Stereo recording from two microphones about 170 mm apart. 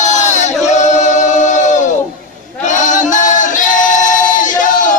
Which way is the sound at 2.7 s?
45° left (ahead or behind).